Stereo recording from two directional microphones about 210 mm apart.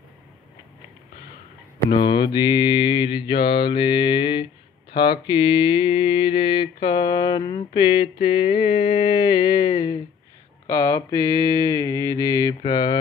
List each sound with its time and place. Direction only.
1.9 s mantra: 20° left (ahead or behind)